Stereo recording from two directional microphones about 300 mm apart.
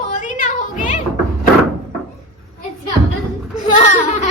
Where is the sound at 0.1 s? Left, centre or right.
Left.